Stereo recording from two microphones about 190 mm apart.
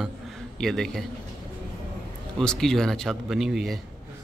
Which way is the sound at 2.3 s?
5° left (ahead or behind).